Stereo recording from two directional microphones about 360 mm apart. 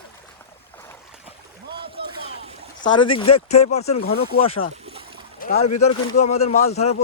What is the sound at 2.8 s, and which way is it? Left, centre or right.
Speech, centre.